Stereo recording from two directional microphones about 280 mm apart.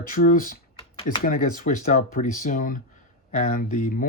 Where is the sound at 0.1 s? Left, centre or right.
Left.